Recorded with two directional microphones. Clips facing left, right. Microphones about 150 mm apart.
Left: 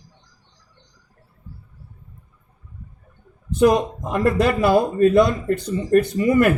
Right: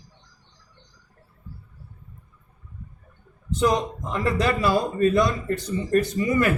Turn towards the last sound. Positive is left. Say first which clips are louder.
# left 5 dB
turn(degrees=55)  # may be behind; listen again after turning